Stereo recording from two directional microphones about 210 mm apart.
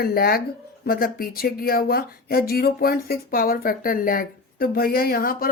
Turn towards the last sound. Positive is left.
turn(degrees=45)  # may be behind; listen again after turning